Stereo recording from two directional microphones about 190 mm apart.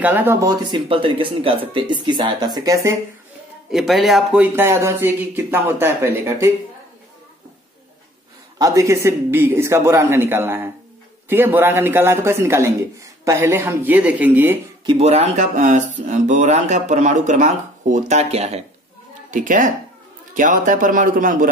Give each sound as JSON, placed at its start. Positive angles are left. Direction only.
{"t": 0.0, "sound": "speech", "side_deg": -10}
{"t": 3.7, "sound": "speech", "side_deg": 0}
{"t": 8.5, "sound": "speech", "side_deg": -15}
{"t": 14.9, "sound": "speech", "side_deg": -30}